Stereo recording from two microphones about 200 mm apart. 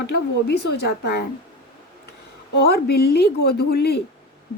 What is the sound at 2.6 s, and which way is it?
A woman's voice, 50° left (ahead or behind).